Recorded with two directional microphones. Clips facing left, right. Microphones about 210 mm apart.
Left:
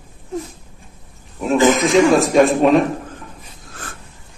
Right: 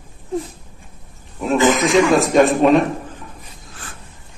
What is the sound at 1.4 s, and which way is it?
Speech, centre (ahead or behind).